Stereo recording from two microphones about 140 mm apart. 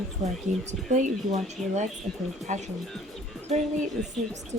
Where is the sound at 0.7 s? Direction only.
60° right (ahead or behind).